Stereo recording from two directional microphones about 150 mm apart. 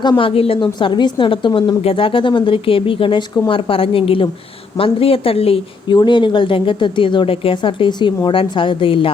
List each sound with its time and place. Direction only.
0.2 s speech: 40° left (ahead or behind)